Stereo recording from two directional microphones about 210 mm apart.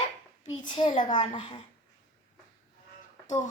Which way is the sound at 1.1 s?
25° left (ahead or behind).